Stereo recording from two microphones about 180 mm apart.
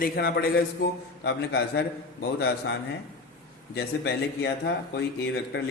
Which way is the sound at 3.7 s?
65° left (ahead or behind).